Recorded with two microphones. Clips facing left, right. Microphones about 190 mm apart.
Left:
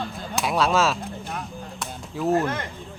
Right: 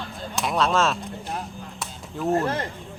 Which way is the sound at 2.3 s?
30° right (ahead or behind).